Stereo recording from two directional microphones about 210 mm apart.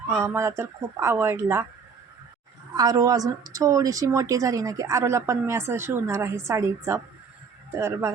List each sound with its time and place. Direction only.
0.2 s a woman's voice: 10° right (ahead or behind)
2.7 s a woman's voice: 15° right (ahead or behind)